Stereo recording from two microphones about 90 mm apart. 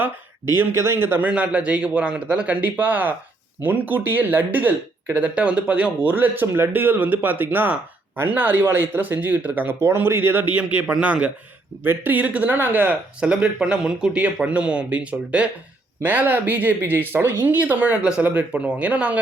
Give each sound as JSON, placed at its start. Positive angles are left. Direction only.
{"t": 0.5, "sound": "speech", "side_deg": -30}
{"t": 1.3, "sound": "speech", "side_deg": -15}
{"t": 9.8, "sound": "speech", "side_deg": -30}